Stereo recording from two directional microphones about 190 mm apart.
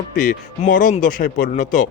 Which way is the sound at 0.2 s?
45° left (ahead or behind).